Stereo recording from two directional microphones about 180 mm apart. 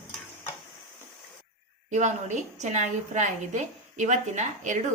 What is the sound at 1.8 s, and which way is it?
A woman's voice, 40° right (ahead or behind).